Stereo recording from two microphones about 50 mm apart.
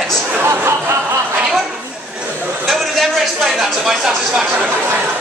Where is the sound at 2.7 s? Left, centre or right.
Centre.